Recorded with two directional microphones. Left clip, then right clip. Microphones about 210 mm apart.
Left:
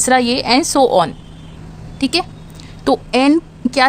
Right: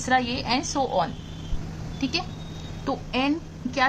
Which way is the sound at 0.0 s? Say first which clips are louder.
Left 10 dB; 50° left (ahead or behind).